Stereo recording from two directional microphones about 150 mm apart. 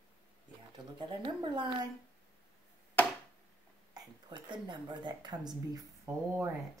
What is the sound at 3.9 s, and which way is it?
A woman's voice, 30° right (ahead or behind).